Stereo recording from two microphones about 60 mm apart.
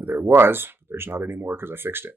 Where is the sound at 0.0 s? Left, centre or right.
Right.